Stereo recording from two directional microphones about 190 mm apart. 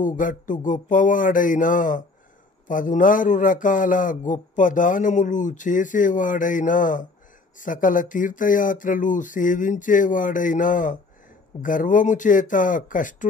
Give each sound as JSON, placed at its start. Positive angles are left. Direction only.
{"t": 0.0, "sound": "speech", "side_deg": 45}